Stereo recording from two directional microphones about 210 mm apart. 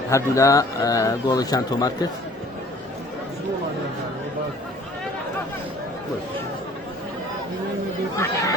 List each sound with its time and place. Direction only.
0.1 s a man's voice: 15° left (ahead or behind)
8.1 s a man's voice: 15° left (ahead or behind)